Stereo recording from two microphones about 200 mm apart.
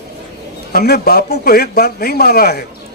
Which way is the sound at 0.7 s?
50° left (ahead or behind).